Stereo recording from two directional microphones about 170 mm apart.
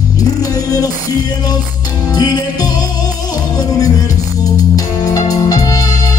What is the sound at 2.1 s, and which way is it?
Music, 25° left (ahead or behind).